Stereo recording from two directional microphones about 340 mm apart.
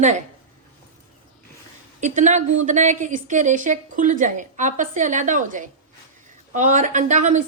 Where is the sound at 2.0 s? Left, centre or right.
Right.